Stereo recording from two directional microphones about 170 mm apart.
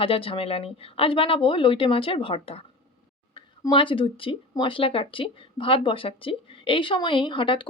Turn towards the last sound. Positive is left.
turn(degrees=30)  # may be behind; listen again after turning